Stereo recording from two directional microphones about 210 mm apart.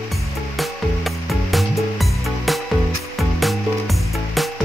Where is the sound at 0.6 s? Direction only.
Centre (ahead or behind).